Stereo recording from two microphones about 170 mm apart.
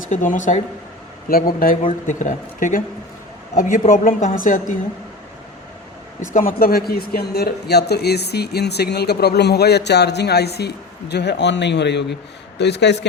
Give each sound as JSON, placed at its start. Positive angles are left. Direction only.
{"t": 0.1, "sound": "speech", "side_deg": 50}
{"t": 1.3, "sound": "speech", "side_deg": 60}
{"t": 6.3, "sound": "a man's voice", "side_deg": 55}
{"t": 11.1, "sound": "a man's voice", "side_deg": 85}